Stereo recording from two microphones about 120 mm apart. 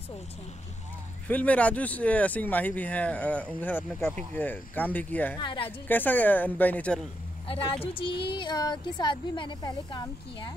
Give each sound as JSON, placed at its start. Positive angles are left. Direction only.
{"t": 1.2, "sound": "speech", "side_deg": 10}
{"t": 5.4, "sound": "a woman's voice", "side_deg": 40}
{"t": 5.9, "sound": "speech", "side_deg": 15}
{"t": 7.8, "sound": "a woman's voice", "side_deg": 45}